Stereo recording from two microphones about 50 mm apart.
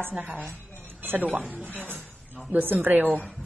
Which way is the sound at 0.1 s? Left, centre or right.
Right.